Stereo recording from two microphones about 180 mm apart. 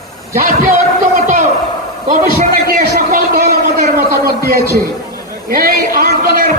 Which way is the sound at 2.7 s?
55° right (ahead or behind).